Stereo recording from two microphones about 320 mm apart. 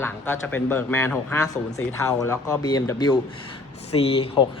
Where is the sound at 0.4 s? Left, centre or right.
Centre.